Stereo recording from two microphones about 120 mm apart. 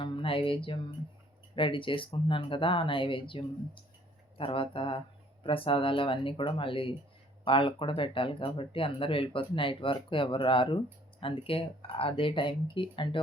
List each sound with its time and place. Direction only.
0.0 s music: 50° left (ahead or behind)
1.5 s speech: 45° left (ahead or behind)